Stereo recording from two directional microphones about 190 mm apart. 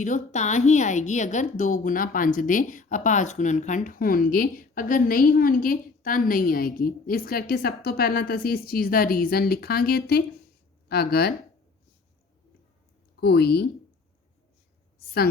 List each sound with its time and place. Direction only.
0.0 s a woman's voice: 40° left (ahead or behind); by 11.3 s 55° left (ahead or behind)
13.1 s speech: 60° left (ahead or behind)